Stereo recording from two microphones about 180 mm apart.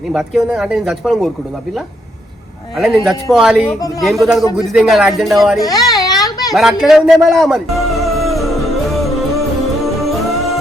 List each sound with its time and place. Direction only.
0.1 s speech: centre (ahead or behind)
2.7 s speech: centre (ahead or behind)
5.6 s a sound: 20° left (ahead or behind)
6.5 s speech: centre (ahead or behind)
9.8 s music: centre (ahead or behind)